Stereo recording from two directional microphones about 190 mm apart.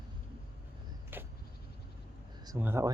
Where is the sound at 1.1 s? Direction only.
10° right (ahead or behind).